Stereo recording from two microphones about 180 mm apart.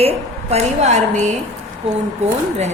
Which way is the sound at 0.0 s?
35° right (ahead or behind).